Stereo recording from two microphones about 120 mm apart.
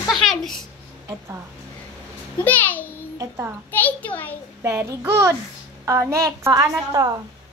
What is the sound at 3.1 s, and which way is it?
Speech, 20° right (ahead or behind).